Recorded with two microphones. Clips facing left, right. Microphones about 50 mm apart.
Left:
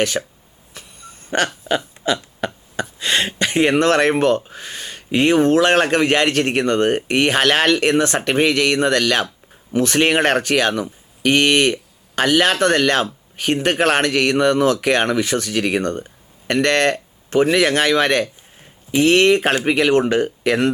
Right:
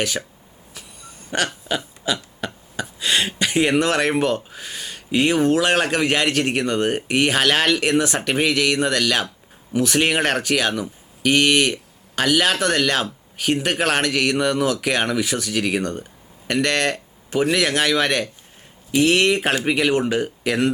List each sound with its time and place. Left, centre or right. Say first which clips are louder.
0.2 s speech: left 5 dB; centre
1.3 s speech: left 3 dB; centre
1.6 s a sound: left 4 dB; centre
2.8 s speech: left 1 dB; centre
15.8 s speech: left 3 dB; left
16.5 s speech: left 4 dB; centre
20.1 s speech: left 4 dB; centre